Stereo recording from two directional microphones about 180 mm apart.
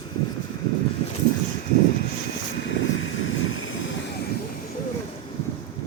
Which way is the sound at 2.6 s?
90° left.